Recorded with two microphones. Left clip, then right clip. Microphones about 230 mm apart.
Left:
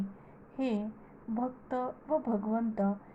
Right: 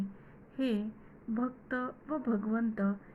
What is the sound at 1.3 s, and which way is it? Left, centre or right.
A woman's voice, left.